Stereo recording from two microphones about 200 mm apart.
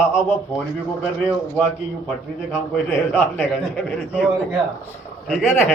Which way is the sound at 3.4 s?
5° left (ahead or behind).